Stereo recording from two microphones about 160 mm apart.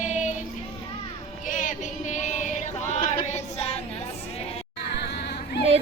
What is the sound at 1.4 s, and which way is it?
Female singing, 55° left (ahead or behind).